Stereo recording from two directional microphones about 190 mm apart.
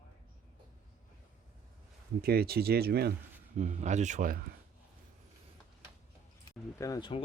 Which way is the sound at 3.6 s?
40° right (ahead or behind).